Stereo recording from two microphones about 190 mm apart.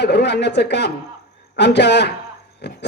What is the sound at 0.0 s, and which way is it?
A man's voice, 65° left (ahead or behind).